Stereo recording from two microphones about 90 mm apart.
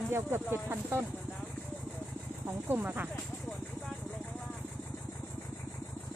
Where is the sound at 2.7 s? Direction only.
20° right (ahead or behind).